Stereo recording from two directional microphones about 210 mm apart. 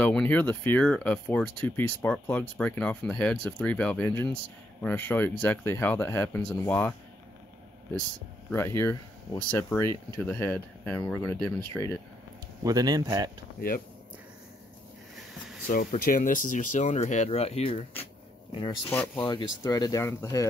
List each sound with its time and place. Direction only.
0.0 s speech: 5° left (ahead or behind)
8.5 s speech: 10° left (ahead or behind)
12.6 s speech: 20° right (ahead or behind)
13.6 s speech: 45° left (ahead or behind)
15.9 s speech: 40° left (ahead or behind); by 20.4 s 15° left (ahead or behind)